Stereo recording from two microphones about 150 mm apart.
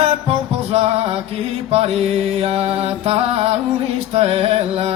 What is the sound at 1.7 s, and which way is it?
Mantra, 40° right (ahead or behind).